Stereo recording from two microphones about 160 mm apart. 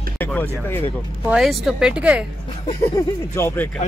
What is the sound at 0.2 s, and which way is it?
Speech, 10° left (ahead or behind).